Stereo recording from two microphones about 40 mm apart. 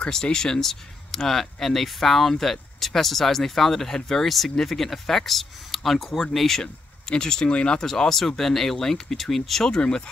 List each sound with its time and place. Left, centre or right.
0.1 s speech: centre
7.8 s speech: centre